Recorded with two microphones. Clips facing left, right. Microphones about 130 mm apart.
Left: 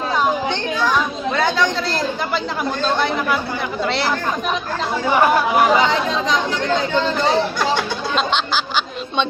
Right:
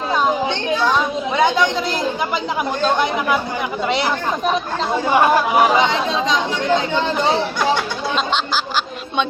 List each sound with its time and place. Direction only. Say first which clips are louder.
0.8 s speech: even; 25° right (ahead or behind)
3.8 s speech: right 2 dB; 15° right (ahead or behind)